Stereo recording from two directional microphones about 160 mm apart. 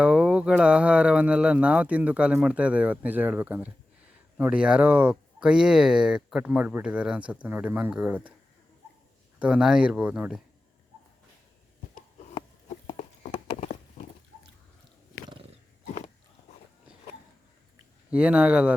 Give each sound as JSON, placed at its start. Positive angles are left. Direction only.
{"t": 0.0, "sound": "speech", "side_deg": -5}
{"t": 9.4, "sound": "speech", "side_deg": -5}
{"t": 11.9, "sound": "a sound", "side_deg": 35}
{"t": 18.1, "sound": "speech", "side_deg": -10}